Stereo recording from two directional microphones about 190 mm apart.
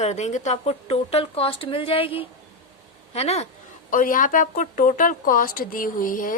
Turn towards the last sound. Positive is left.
turn(degrees=45)  # may be behind; listen again after turning